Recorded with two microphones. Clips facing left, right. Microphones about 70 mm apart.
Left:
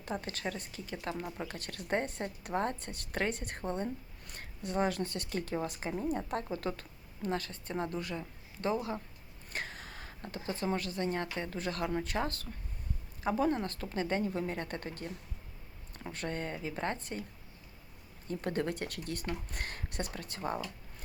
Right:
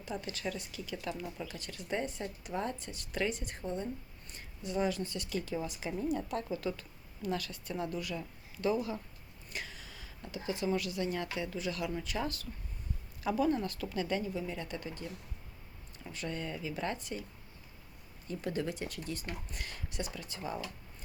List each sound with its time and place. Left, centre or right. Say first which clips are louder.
0.0 s speech: left 1 dB; left
14.3 s speech: left 2 dB; left
18.3 s speech: left 2 dB; left